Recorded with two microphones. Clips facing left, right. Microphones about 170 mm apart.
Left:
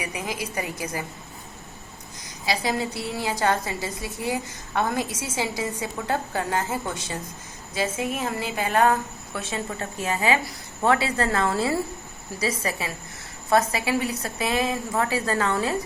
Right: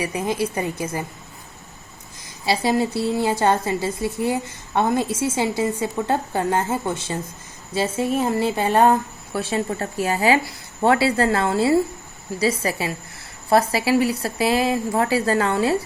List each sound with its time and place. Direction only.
0.0 s a woman's voice: 30° right (ahead or behind)
2.5 s a woman's voice: 30° right (ahead or behind)